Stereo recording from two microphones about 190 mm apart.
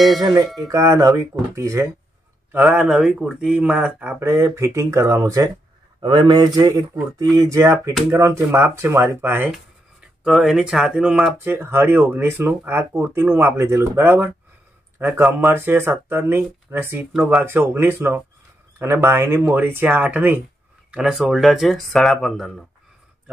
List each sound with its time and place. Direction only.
0.2 s speech: 20° right (ahead or behind); by 22.7 s centre (ahead or behind)